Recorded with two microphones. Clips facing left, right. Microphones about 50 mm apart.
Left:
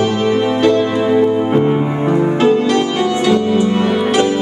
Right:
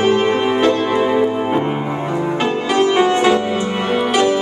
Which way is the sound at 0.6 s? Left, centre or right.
Centre.